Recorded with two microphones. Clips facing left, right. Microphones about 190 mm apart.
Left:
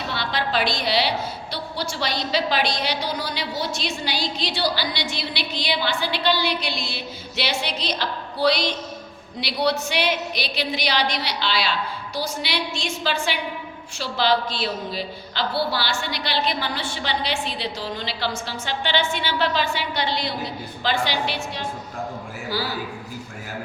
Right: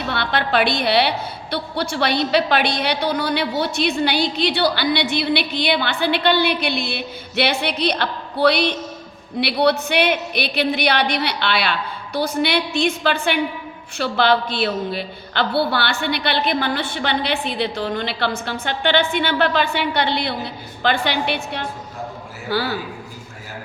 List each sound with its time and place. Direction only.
0.1 s a woman's voice: 60° right (ahead or behind)